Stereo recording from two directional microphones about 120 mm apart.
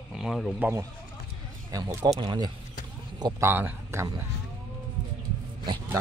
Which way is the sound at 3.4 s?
15° right (ahead or behind).